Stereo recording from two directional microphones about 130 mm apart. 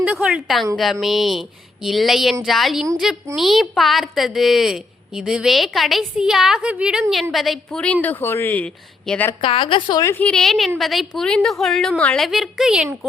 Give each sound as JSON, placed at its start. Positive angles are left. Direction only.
{"t": 0.0, "sound": "a woman's voice", "side_deg": -10}
{"t": 9.4, "sound": "a woman's voice", "side_deg": 40}
{"t": 10.0, "sound": "a woman's voice", "side_deg": 20}
{"t": 10.2, "sound": "a woman's voice", "side_deg": 5}